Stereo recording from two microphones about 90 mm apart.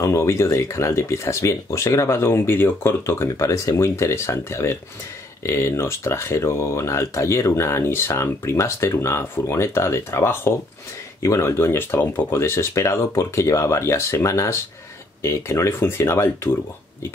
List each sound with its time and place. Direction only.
0.0 s speech: 35° left (ahead or behind)